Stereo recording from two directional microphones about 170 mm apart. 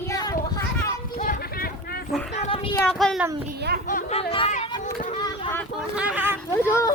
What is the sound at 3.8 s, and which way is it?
Speech, 45° left (ahead or behind).